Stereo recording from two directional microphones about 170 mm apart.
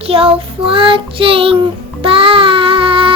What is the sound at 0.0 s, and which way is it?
Child singing, 35° right (ahead or behind).